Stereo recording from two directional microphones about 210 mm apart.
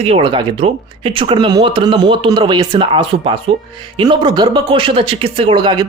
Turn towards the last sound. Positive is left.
turn(degrees=-20)  # may be behind; listen again after turning